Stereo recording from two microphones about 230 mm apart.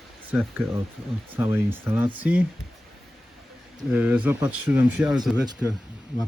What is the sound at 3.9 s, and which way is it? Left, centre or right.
Speech, centre.